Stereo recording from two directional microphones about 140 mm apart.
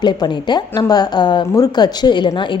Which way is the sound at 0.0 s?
30° left (ahead or behind).